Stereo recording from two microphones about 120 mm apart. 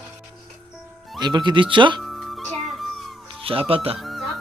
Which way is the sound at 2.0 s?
Centre (ahead or behind).